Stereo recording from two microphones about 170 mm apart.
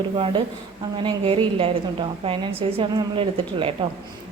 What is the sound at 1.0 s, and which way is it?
A woman's voice, 30° right (ahead or behind).